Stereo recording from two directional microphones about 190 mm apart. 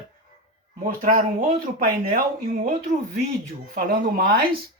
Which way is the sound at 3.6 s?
50° right (ahead or behind).